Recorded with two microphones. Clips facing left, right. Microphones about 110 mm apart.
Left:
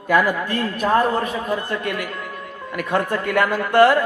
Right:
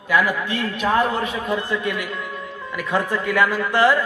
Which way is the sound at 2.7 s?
55° left (ahead or behind).